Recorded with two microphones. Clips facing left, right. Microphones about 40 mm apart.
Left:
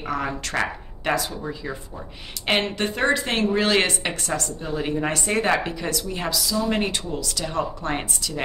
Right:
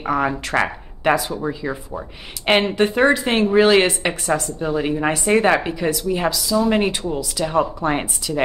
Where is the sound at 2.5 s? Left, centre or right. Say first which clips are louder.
Right 6 dB; centre.